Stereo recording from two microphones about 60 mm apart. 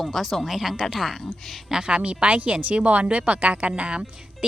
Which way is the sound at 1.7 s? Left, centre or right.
Centre.